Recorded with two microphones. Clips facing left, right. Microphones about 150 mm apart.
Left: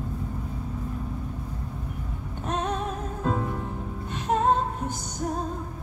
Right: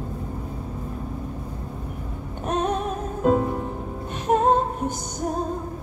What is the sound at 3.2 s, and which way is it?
Music, 25° right (ahead or behind).